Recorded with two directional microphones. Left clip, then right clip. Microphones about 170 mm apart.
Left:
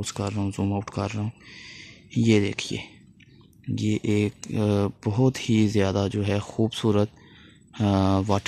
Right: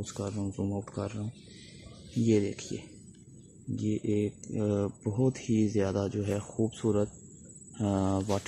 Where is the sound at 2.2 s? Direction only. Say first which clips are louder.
Left 5 dB; 25° left (ahead or behind).